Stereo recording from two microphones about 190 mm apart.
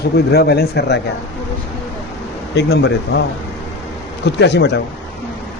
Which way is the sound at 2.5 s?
60° left (ahead or behind).